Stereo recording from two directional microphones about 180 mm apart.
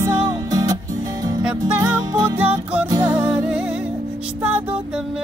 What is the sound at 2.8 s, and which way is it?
Music, 20° right (ahead or behind).